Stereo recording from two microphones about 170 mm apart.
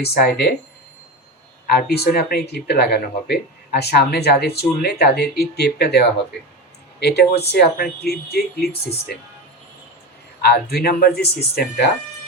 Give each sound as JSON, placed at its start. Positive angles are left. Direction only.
{"t": 0.0, "sound": "speech", "side_deg": 70}
{"t": 1.6, "sound": "speech", "side_deg": 70}
{"t": 10.4, "sound": "speech", "side_deg": 70}